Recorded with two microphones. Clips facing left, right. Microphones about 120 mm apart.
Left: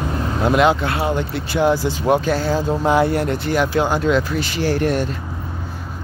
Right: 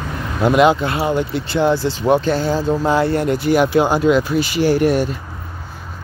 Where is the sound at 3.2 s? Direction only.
5° right (ahead or behind).